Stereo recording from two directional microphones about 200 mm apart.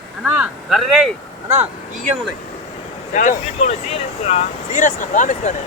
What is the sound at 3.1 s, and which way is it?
Speech, 40° left (ahead or behind).